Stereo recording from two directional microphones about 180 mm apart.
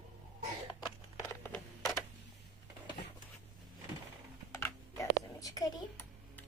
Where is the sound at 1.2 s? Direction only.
15° left (ahead or behind).